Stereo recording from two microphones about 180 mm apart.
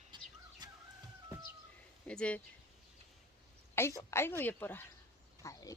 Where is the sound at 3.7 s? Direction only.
15° left (ahead or behind).